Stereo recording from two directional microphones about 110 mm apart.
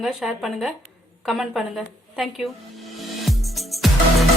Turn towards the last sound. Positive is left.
turn(degrees=0)  # may be behind; listen again after turning